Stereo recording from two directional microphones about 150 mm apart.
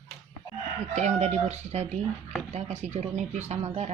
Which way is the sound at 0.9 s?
50° right (ahead or behind).